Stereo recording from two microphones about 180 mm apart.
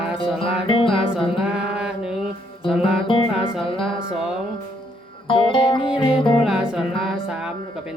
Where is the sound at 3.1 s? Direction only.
30° left (ahead or behind).